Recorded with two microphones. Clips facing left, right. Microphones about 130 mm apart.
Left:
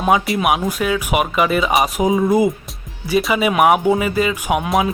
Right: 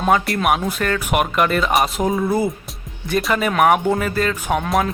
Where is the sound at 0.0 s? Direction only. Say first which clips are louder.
Left 1 dB; 5° left (ahead or behind).